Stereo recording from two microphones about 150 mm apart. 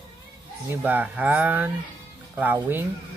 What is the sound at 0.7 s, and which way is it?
Speech, 10° right (ahead or behind).